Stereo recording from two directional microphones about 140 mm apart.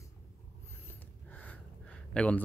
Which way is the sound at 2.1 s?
10° left (ahead or behind).